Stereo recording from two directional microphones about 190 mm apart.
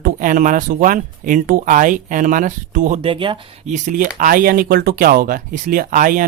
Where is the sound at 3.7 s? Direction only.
45° right (ahead or behind).